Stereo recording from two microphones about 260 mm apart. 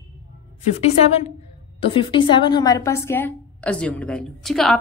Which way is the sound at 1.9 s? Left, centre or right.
Centre.